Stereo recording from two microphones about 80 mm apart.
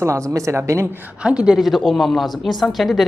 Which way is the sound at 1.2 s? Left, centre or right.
Centre.